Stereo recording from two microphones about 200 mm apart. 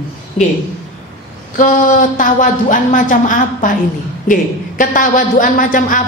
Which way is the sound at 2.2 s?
40° left (ahead or behind).